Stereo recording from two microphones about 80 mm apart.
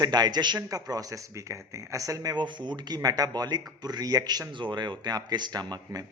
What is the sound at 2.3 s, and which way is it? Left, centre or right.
Speech, right.